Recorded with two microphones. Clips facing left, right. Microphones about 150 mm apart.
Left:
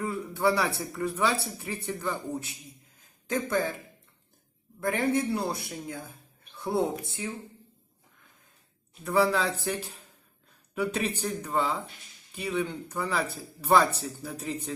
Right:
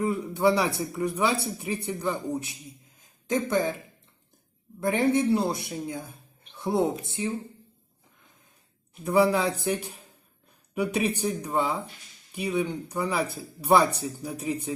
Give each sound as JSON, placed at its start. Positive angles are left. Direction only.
{"t": 0.0, "sound": "a man's voice", "side_deg": -20}
{"t": 4.8, "sound": "a man's voice", "side_deg": -20}
{"t": 9.0, "sound": "speech", "side_deg": -15}